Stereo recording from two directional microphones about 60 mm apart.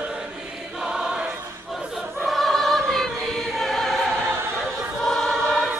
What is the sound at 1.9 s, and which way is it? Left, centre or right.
Choir, centre.